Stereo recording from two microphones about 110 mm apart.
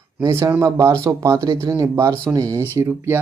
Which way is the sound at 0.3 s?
25° right (ahead or behind).